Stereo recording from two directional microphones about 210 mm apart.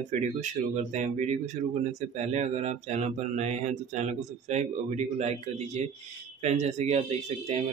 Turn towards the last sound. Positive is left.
turn(degrees=-30)  # may be behind; listen again after turning